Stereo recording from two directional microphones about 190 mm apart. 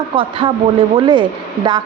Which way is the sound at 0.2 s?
25° right (ahead or behind).